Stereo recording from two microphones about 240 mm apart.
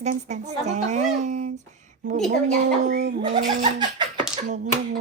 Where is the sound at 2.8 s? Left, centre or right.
Right.